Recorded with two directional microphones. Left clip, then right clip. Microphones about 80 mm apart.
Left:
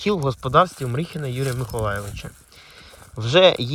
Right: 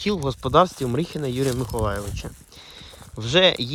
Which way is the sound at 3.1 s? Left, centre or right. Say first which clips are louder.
Left 3 dB; right.